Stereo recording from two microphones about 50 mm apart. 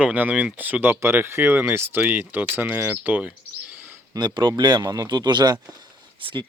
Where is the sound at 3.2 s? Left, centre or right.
Right.